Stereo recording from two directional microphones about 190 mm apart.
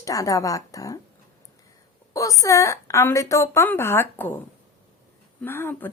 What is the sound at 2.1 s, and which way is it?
Speech, 15° left (ahead or behind).